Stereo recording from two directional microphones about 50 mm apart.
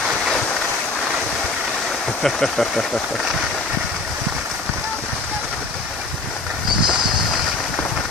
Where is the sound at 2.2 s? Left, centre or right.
Centre.